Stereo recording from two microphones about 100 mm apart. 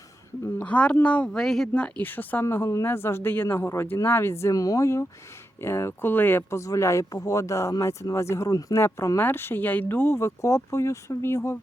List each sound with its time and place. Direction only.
0.6 s speech: 10° left (ahead or behind)